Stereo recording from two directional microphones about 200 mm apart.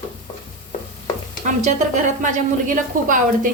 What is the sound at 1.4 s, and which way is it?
Speech, 35° right (ahead or behind).